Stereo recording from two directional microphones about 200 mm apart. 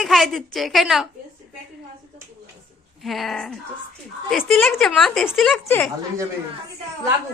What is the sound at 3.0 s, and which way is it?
A woman's voice, centre (ahead or behind).